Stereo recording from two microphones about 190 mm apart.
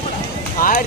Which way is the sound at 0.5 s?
45° left (ahead or behind).